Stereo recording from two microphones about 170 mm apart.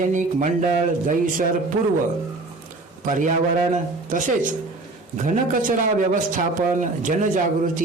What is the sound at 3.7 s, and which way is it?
Speech, 50° right (ahead or behind).